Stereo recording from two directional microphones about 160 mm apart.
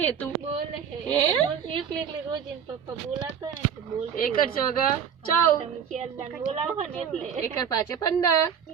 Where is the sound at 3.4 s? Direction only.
25° right (ahead or behind).